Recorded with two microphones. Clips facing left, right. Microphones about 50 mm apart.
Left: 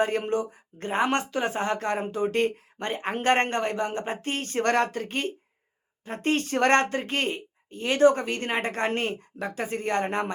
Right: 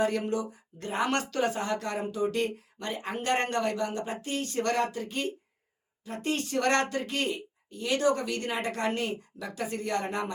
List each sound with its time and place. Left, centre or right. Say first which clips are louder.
0.0 s speech: left 3 dB; left
1.5 s speech: left 4 dB; left